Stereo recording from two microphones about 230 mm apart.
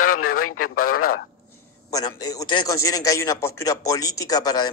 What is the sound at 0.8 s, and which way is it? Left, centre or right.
Speech, left.